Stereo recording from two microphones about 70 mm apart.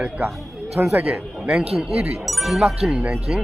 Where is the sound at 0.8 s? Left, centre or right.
Right.